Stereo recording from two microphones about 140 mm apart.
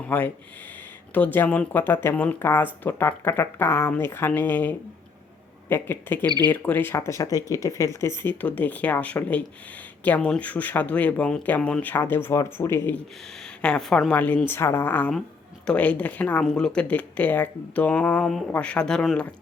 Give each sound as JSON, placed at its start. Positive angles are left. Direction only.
{"t": 0.1, "sound": "speech", "side_deg": 10}
{"t": 13.4, "sound": "speech", "side_deg": 5}